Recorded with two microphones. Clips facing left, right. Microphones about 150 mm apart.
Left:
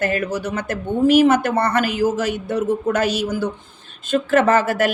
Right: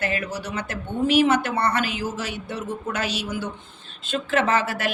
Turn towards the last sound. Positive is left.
turn(degrees=45)  # may be behind; listen again after turning